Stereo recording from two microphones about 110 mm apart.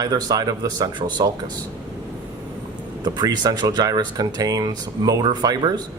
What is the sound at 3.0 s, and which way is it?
Speech, 40° right (ahead or behind).